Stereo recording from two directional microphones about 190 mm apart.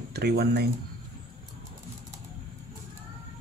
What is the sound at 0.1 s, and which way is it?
Speech, 60° right (ahead or behind).